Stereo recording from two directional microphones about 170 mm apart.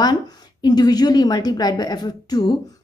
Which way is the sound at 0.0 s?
25° left (ahead or behind).